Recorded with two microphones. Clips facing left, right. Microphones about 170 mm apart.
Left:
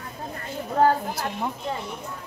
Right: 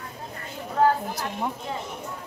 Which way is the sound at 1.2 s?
5° right (ahead or behind).